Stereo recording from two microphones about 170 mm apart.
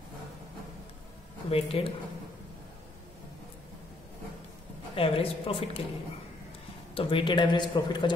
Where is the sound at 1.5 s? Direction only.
35° left (ahead or behind).